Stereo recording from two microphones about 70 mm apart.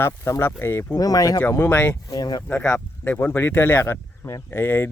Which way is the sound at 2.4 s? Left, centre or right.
Left.